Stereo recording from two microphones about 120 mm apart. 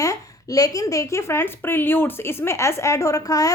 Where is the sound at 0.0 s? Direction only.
25° left (ahead or behind).